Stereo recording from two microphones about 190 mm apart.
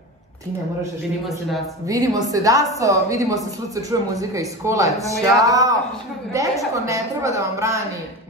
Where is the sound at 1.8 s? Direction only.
20° right (ahead or behind).